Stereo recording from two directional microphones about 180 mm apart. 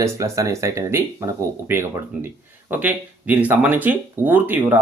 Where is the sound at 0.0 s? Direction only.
20° right (ahead or behind).